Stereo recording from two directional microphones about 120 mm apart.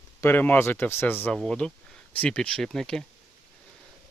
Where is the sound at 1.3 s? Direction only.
5° left (ahead or behind).